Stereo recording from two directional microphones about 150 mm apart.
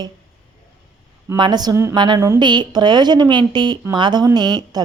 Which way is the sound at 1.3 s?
30° right (ahead or behind).